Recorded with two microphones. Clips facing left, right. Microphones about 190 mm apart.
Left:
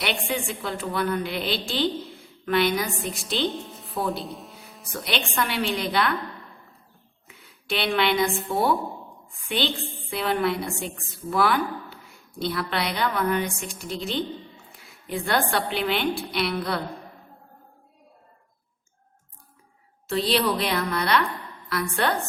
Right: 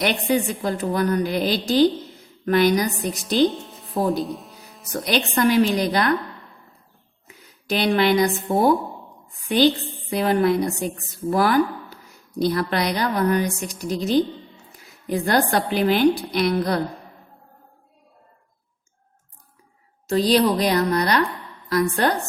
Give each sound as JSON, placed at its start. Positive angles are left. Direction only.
{"t": 0.0, "sound": "a woman's voice", "side_deg": -40}
{"t": 7.7, "sound": "a woman's voice", "side_deg": -40}
{"t": 20.1, "sound": "a woman's voice", "side_deg": -40}